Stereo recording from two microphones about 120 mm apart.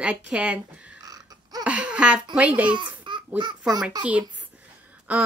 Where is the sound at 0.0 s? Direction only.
10° right (ahead or behind).